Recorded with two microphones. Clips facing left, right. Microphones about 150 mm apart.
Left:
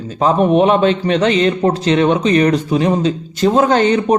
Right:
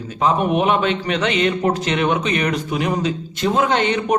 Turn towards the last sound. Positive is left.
turn(degrees=35)  # may be behind; listen again after turning